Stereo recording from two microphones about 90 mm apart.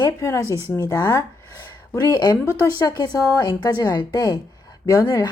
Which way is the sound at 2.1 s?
50° left (ahead or behind).